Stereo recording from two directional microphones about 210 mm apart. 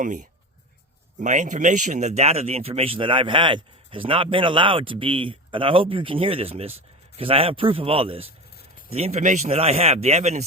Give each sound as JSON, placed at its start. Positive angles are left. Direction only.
{"t": 0.0, "sound": "a man's voice", "side_deg": -40}